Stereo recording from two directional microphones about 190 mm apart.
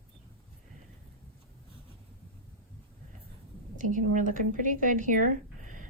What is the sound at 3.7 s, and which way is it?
Speech, 45° right (ahead or behind).